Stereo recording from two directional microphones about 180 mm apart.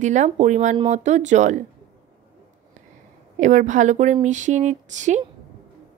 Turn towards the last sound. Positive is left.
turn(degrees=-40)  # may be behind; listen again after turning